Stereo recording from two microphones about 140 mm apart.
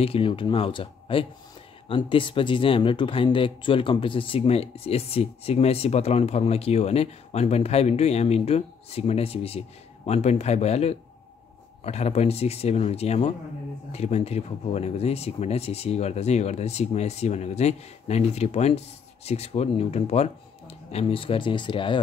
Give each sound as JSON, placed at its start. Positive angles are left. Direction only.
{"t": 0.0, "sound": "speech", "side_deg": 40}